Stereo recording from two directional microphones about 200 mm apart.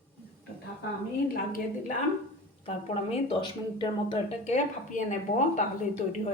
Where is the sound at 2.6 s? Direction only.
30° left (ahead or behind).